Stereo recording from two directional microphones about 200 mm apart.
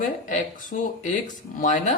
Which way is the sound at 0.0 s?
40° left (ahead or behind).